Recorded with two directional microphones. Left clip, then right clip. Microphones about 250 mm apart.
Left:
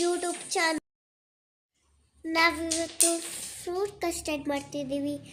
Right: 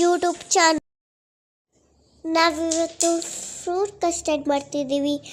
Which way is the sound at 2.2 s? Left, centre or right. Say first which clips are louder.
Right 5 dB; right.